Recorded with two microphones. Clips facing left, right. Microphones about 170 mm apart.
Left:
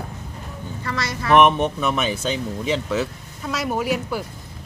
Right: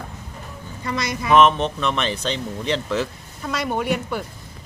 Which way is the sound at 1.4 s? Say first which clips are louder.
Even; 10° left (ahead or behind).